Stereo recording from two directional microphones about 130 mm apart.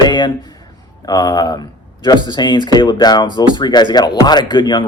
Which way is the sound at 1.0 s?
30° left (ahead or behind).